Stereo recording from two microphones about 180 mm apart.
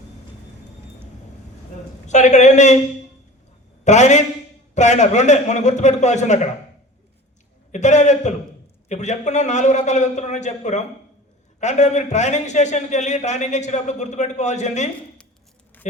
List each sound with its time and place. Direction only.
2.0 s a man's voice: 40° left (ahead or behind)
3.8 s a man's voice: 40° left (ahead or behind)
7.7 s a man's voice: 40° left (ahead or behind)